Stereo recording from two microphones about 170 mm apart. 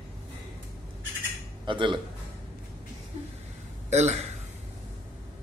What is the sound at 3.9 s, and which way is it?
Speech, 40° right (ahead or behind).